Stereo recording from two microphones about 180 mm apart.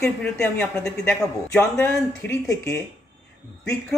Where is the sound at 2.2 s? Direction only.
15° left (ahead or behind).